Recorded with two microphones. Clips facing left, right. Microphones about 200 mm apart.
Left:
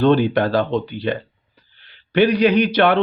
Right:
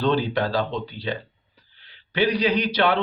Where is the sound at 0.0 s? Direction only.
60° left (ahead or behind).